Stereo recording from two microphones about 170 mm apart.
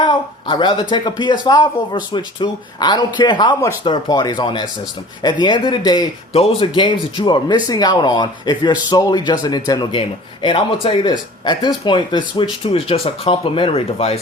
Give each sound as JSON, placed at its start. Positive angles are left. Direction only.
{"t": 0.0, "sound": "speech", "side_deg": 25}
{"t": 6.3, "sound": "speech", "side_deg": 35}